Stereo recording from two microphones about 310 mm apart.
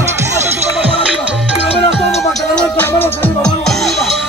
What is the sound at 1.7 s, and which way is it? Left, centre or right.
Music, centre.